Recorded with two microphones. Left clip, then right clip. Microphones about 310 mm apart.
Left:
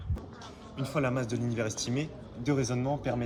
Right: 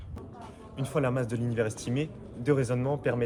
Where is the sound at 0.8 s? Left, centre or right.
Right.